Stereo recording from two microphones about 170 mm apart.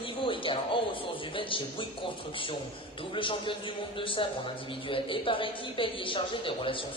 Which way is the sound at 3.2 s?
30° left (ahead or behind).